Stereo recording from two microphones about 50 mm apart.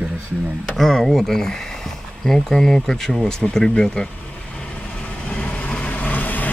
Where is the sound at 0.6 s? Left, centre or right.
Centre.